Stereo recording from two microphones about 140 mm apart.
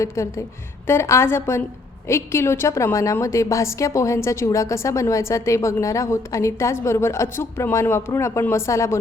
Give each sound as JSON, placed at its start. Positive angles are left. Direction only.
{"t": 0.0, "sound": "a woman's voice", "side_deg": 20}